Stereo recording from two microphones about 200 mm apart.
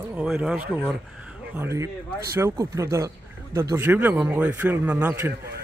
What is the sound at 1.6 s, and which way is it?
Speech, 15° right (ahead or behind).